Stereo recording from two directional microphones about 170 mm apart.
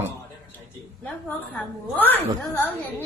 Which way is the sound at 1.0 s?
5° left (ahead or behind).